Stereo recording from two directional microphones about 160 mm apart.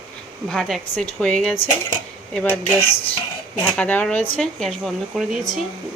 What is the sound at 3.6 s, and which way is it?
Speech, 5° left (ahead or behind).